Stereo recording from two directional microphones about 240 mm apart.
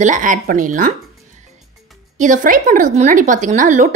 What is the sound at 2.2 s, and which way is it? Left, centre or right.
A woman's voice, right.